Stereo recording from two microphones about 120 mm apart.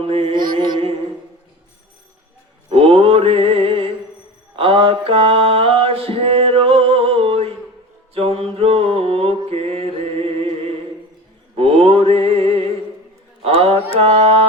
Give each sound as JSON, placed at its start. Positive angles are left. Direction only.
{"t": 0.0, "sound": "mantra", "side_deg": -55}
{"t": 0.3, "sound": "mantra", "side_deg": -40}
{"t": 2.6, "sound": "music", "side_deg": -50}
{"t": 4.5, "sound": "a sound", "side_deg": -45}
{"t": 8.1, "sound": "mantra", "side_deg": -55}
{"t": 11.5, "sound": "music", "side_deg": -55}
{"t": 13.4, "sound": "mantra", "side_deg": -55}
{"t": 14.0, "sound": "music", "side_deg": -55}